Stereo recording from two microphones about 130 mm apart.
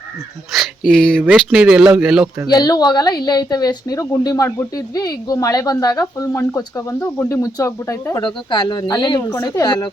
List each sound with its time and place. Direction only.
0.5 s speech: centre (ahead or behind)
2.5 s speech: 30° left (ahead or behind)
8.2 s speech: 35° left (ahead or behind)